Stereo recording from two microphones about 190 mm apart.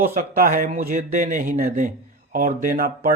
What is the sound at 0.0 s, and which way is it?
Speech, 50° right (ahead or behind).